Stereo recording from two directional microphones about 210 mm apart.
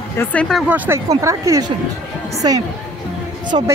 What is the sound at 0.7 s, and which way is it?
Speech, 10° right (ahead or behind).